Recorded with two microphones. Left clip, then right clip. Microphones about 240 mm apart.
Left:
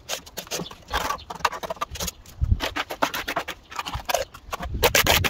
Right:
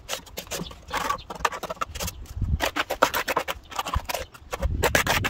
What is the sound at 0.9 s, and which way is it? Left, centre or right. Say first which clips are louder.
Chicken: even; centre.